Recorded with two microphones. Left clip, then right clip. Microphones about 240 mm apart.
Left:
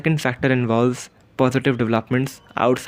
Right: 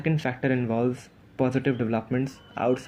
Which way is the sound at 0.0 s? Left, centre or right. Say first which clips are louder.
Left 6 dB; left.